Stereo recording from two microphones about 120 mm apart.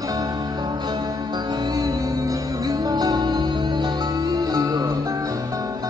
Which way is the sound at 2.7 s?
35° right (ahead or behind).